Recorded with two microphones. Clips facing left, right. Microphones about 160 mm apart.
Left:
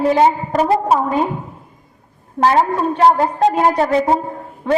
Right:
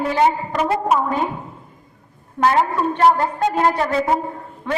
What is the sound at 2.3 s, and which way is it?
A woman's voice, 35° left (ahead or behind).